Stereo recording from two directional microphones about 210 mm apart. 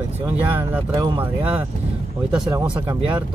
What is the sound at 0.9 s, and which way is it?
Speech, 20° right (ahead or behind).